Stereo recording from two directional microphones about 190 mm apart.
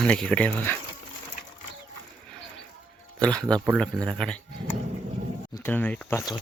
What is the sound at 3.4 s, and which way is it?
Speech, 20° right (ahead or behind).